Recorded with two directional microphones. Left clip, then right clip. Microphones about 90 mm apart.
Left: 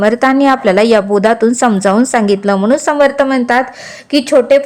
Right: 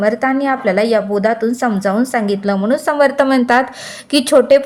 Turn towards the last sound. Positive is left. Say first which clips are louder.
# left 1 dB
turn(degrees=5)  # may be behind; listen again after turning